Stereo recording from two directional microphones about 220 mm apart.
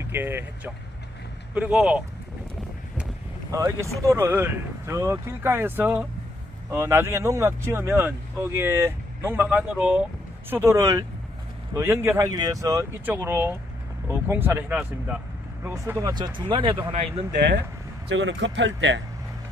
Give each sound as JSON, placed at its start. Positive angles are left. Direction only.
{"t": 0.1, "sound": "speech", "side_deg": -10}
{"t": 1.5, "sound": "speech", "side_deg": -5}
{"t": 3.5, "sound": "speech", "side_deg": -15}
{"t": 18.0, "sound": "speech", "side_deg": -55}